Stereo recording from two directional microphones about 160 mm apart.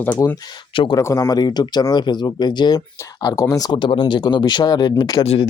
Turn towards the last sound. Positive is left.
turn(degrees=25)  # may be behind; listen again after turning